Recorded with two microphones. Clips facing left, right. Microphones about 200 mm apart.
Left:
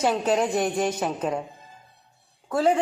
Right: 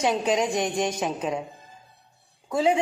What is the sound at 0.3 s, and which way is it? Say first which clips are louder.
Speech: left 1 dB; 5° left (ahead or behind).